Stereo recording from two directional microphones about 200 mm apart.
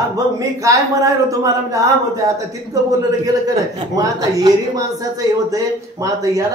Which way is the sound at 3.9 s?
15° right (ahead or behind).